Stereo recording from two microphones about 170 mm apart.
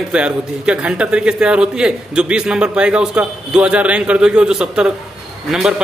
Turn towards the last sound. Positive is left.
turn(degrees=0)  # may be behind; listen again after turning